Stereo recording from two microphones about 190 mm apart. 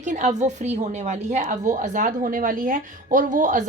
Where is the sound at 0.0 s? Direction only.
40° right (ahead or behind).